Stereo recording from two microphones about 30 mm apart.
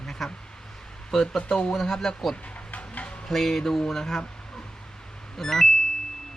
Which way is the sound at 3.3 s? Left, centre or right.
Centre.